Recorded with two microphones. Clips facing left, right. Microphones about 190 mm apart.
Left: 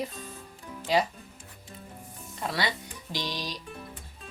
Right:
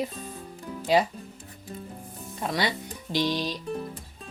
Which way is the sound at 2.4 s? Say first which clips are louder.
Right 3 dB; 20° right (ahead or behind).